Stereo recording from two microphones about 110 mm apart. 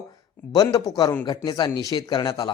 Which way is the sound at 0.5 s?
35° left (ahead or behind).